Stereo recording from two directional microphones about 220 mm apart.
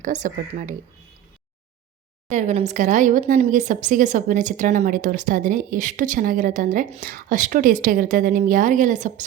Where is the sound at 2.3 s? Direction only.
30° right (ahead or behind).